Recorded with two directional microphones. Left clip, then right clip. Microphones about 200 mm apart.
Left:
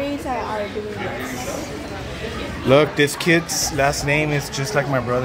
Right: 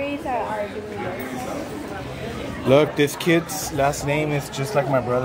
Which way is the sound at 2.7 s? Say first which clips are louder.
Left 2 dB; 5° right (ahead or behind).